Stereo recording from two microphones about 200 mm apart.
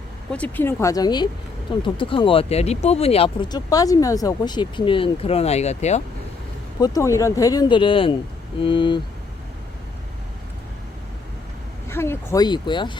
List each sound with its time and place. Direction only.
0.3 s speech: 5° left (ahead or behind); by 6.0 s 35° left (ahead or behind)
6.7 s speech: 20° left (ahead or behind)
11.9 s speech: 10° left (ahead or behind)